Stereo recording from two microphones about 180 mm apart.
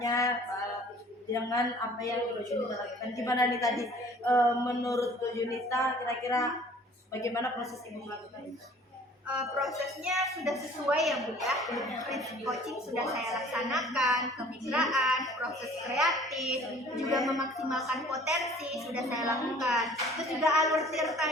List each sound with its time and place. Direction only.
0.0 s a sound: 15° left (ahead or behind)
1.3 s a man's voice: 15° left (ahead or behind)
9.2 s a woman's voice: 5° right (ahead or behind)